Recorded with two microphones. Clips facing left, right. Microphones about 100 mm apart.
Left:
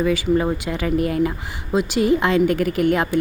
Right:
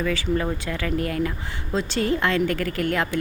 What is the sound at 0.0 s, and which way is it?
Speech, 20° left (ahead or behind).